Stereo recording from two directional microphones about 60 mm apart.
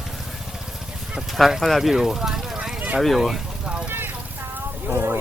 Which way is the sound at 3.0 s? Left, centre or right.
Centre.